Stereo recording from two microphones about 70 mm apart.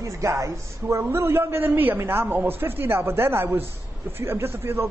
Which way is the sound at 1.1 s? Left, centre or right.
Right.